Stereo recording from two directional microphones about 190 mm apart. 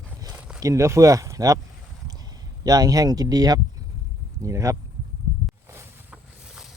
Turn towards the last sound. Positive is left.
turn(degrees=-5)  # may be behind; listen again after turning